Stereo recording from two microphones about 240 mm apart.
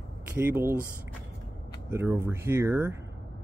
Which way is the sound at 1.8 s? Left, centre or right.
Centre.